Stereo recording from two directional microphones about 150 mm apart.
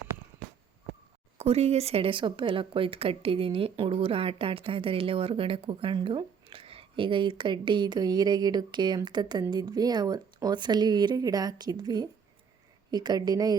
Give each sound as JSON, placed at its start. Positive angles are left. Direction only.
{"t": 1.4, "sound": "speech", "side_deg": -45}